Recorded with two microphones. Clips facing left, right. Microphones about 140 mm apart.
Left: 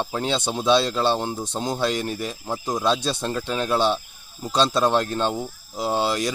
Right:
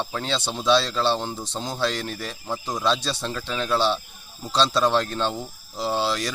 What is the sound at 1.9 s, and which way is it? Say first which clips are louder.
Speech: left 4 dB; 15° left (ahead or behind).